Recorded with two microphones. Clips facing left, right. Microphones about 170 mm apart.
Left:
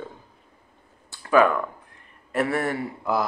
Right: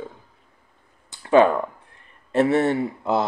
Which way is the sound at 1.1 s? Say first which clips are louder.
Right 3 dB; 25° right (ahead or behind).